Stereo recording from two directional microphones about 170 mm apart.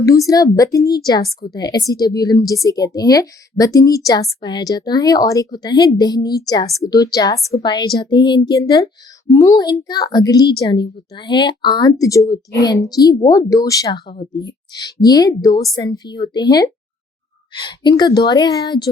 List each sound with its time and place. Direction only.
0.0 s a woman's voice: 20° left (ahead or behind)